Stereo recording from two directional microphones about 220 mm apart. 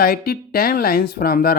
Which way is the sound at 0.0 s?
45° left (ahead or behind).